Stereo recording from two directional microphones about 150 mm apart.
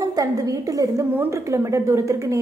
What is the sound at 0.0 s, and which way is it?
A woman's voice, 25° right (ahead or behind).